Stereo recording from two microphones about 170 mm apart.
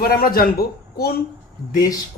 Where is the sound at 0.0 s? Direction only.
60° left (ahead or behind).